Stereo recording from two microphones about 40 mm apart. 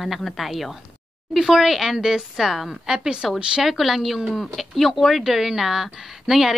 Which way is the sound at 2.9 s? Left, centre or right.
Centre.